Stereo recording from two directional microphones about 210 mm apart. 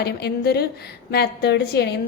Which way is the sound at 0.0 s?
50° left (ahead or behind).